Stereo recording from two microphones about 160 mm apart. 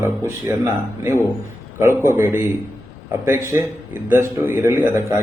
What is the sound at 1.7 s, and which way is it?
A man's voice, 15° right (ahead or behind).